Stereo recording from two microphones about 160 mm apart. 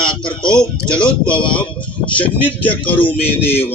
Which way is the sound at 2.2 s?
10° left (ahead or behind).